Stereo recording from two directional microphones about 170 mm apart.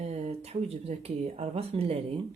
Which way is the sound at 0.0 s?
40° right (ahead or behind).